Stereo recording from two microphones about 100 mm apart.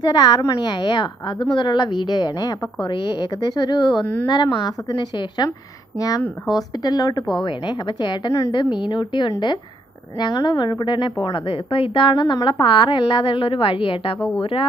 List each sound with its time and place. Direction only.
0.0 s a woman's voice: 45° left (ahead or behind)
4.0 s a woman's voice: 20° left (ahead or behind)
4.3 s a woman's voice: 50° left (ahead or behind)
5.9 s a woman's voice: 35° left (ahead or behind); by 14.7 s 65° left (ahead or behind)